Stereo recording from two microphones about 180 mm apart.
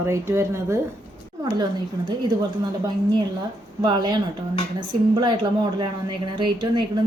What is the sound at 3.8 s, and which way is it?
A woman's voice, 25° right (ahead or behind).